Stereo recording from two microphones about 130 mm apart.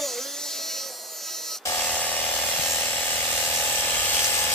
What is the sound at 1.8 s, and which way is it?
Electric toothbrush, 10° left (ahead or behind).